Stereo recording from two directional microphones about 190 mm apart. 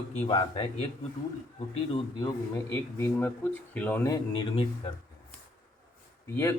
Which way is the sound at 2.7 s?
15° left (ahead or behind).